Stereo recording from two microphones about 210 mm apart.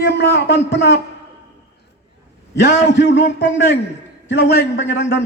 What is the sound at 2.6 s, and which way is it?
A man's voice, 55° left (ahead or behind).